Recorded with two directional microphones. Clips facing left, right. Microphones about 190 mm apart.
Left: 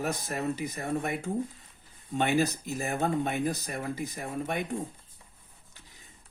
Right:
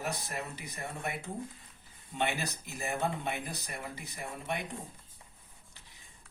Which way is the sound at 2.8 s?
45° left (ahead or behind).